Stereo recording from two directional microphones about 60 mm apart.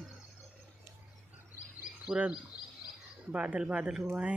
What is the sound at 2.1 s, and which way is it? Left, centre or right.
Speech, centre.